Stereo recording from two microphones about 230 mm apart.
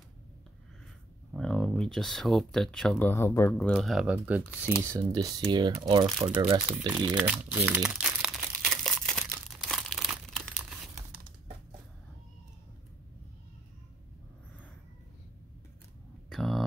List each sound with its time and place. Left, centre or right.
1.3 s speech: centre; by 6.6 s right
6.9 s crumpling: centre
16.3 s a sound: centre